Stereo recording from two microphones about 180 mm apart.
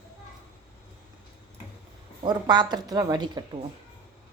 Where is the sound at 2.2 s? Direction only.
25° right (ahead or behind).